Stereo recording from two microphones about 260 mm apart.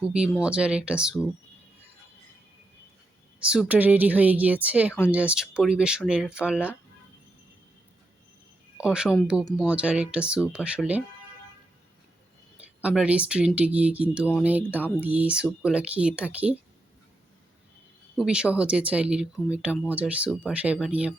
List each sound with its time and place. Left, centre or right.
0.1 s speech: centre
3.4 s speech: centre
8.8 s speech: centre
12.8 s speech: centre
18.2 s speech: centre